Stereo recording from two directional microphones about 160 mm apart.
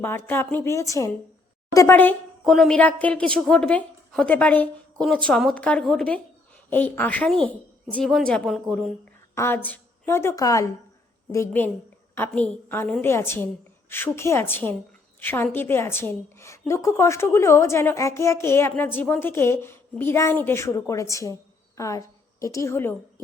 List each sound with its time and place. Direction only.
0.0 s a woman's voice: 15° left (ahead or behind)
2.4 s a woman's voice: centre (ahead or behind)
9.3 s a woman's voice: 15° left (ahead or behind)